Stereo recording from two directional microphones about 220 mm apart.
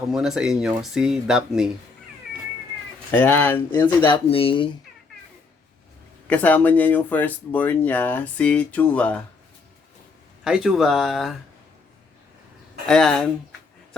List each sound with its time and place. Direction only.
0.1 s speech: centre (ahead or behind)
3.1 s speech: 10° left (ahead or behind)
6.2 s speech: 5° left (ahead or behind)
10.4 s speech: 5° right (ahead or behind)
12.8 s speech: centre (ahead or behind)